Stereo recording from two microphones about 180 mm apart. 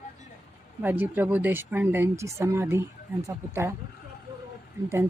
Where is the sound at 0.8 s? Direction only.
10° right (ahead or behind).